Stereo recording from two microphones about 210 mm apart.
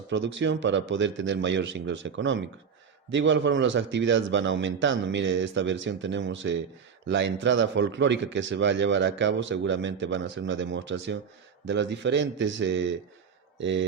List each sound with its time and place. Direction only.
0.1 s a man's voice: 60° right (ahead or behind)